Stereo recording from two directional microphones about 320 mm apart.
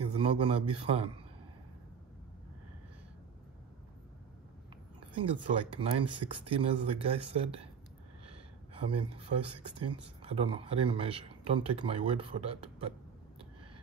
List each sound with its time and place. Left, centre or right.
0.3 s speech: centre
5.1 s speech: centre
8.3 s a sound: centre
10.2 s speech: centre